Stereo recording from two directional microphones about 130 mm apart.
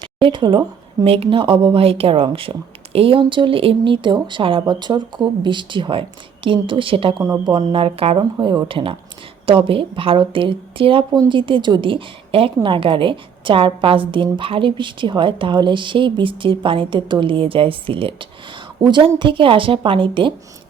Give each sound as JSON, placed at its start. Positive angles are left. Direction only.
{"t": 0.0, "sound": "speech", "side_deg": -40}
{"t": 7.2, "sound": "speech", "side_deg": -30}
{"t": 7.7, "sound": "a woman's voice", "side_deg": -45}